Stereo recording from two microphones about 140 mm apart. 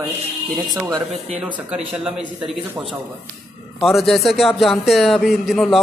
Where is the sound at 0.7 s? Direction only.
25° right (ahead or behind).